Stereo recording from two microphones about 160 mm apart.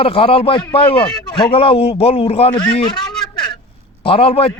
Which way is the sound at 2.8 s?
25° left (ahead or behind).